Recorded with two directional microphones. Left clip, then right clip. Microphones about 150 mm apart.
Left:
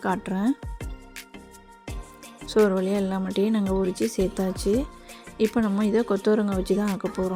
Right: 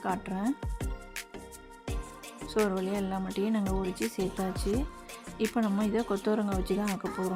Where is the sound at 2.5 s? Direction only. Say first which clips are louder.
Left 9 dB; 30° left (ahead or behind).